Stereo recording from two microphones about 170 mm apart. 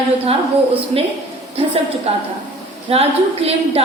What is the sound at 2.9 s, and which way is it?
Speech, 35° right (ahead or behind).